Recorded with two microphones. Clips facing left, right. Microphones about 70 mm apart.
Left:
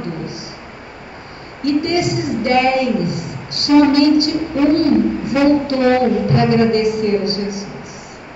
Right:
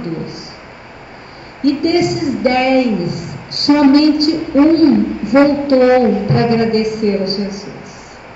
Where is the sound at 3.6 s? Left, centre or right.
Right.